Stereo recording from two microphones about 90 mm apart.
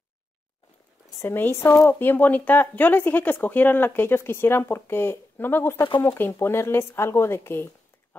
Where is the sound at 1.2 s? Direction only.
25° left (ahead or behind).